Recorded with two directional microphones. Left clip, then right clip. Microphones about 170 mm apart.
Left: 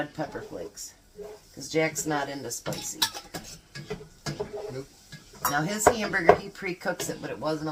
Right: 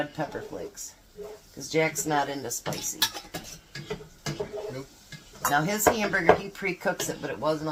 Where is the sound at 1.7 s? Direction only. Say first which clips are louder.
Right 1 dB; 25° right (ahead or behind).